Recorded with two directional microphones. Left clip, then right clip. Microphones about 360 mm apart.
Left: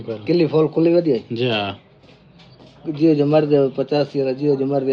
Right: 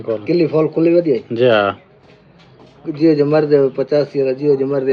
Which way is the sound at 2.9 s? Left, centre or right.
Centre.